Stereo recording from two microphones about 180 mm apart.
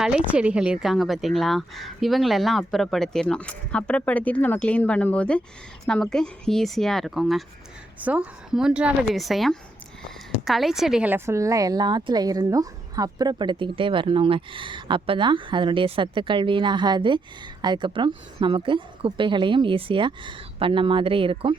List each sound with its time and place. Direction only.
0.0 s a woman's voice: 5° right (ahead or behind); by 21.5 s 30° right (ahead or behind)